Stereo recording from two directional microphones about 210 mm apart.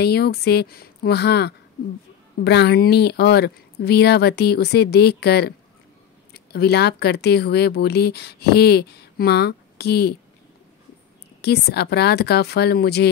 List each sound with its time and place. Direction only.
0.0 s speech: 50° left (ahead or behind)
11.4 s speech: 50° left (ahead or behind)